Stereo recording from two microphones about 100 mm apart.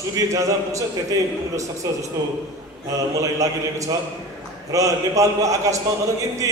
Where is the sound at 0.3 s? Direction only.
35° right (ahead or behind).